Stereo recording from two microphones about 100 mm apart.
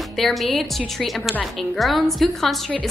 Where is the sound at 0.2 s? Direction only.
Centre (ahead or behind).